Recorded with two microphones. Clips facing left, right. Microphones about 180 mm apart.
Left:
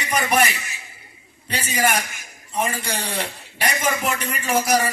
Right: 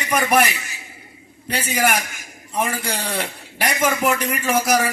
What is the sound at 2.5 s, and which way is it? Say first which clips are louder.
A man's voice: right 1 dB; 60° right (ahead or behind).